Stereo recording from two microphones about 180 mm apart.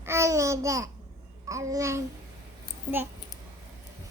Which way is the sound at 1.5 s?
15° right (ahead or behind).